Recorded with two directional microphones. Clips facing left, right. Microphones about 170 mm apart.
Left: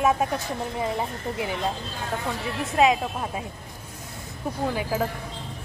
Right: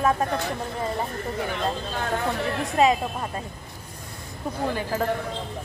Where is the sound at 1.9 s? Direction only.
60° right (ahead or behind).